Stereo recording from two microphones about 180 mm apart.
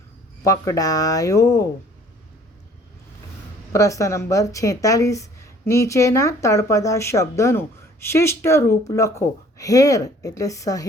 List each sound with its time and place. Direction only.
0.4 s speech: 20° left (ahead or behind)
3.7 s speech: 15° left (ahead or behind)